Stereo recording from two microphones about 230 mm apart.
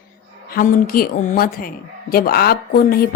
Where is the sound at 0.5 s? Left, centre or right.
Left.